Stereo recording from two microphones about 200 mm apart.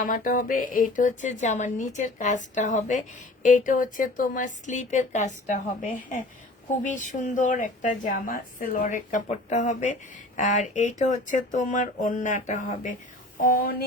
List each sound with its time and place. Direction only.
0.0 s speech: 40° left (ahead or behind)